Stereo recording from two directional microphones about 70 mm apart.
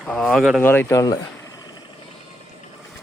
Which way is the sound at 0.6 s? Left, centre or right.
Left.